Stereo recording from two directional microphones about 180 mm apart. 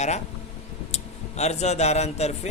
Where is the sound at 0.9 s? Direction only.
35° left (ahead or behind).